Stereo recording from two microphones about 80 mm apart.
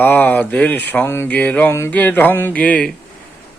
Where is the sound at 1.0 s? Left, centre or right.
Left.